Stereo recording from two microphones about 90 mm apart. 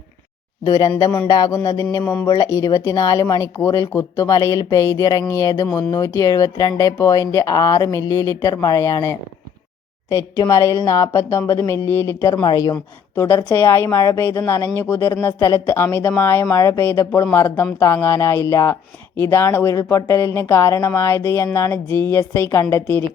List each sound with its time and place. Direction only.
0.6 s speech: 40° left (ahead or behind)
11.1 s speech: 30° left (ahead or behind)
12.3 s a woman's voice: 50° left (ahead or behind)
13.1 s a woman's voice: 25° left (ahead or behind)